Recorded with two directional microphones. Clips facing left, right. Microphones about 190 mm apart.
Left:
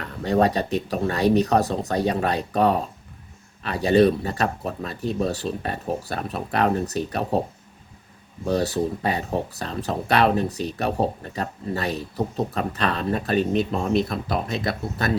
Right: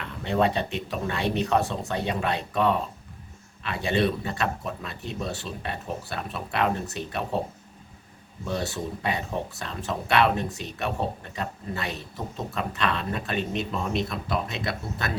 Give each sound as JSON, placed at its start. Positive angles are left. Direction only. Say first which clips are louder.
{"t": 0.0, "sound": "speech", "louder": "left 4 dB", "side_deg": 40}
{"t": 8.4, "sound": "speech", "louder": "left 7 dB", "side_deg": 40}